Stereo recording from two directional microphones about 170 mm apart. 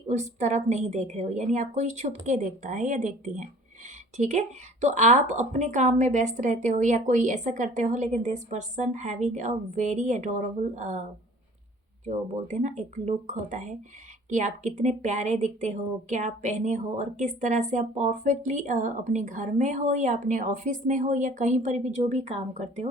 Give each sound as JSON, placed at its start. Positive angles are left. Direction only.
{"t": 0.1, "sound": "speech", "side_deg": -45}
{"t": 12.0, "sound": "speech", "side_deg": -45}